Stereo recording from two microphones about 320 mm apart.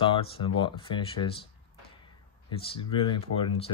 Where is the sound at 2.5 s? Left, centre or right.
Centre.